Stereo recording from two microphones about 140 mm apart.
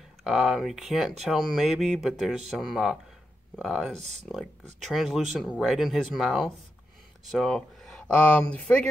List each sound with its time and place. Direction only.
0.2 s speech: centre (ahead or behind)
4.0 s speech: 55° right (ahead or behind)
4.8 s speech: centre (ahead or behind)